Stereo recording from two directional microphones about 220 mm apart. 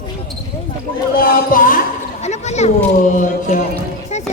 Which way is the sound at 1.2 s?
40° left (ahead or behind).